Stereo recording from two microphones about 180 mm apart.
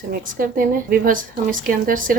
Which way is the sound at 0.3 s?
50° right (ahead or behind).